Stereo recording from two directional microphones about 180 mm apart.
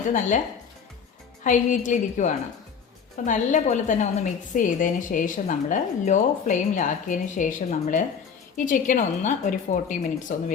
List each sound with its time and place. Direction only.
0.1 s a woman's voice: 45° left (ahead or behind)
1.5 s a woman's voice: 45° left (ahead or behind)